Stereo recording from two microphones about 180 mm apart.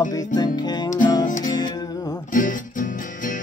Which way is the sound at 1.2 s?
45° left (ahead or behind).